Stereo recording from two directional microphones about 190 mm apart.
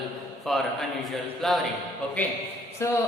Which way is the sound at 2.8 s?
15° left (ahead or behind).